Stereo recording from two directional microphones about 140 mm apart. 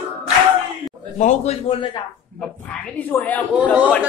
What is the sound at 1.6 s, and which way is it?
Speech, 35° left (ahead or behind).